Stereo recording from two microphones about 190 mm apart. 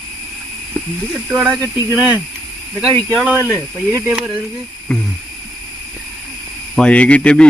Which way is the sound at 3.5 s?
15° right (ahead or behind).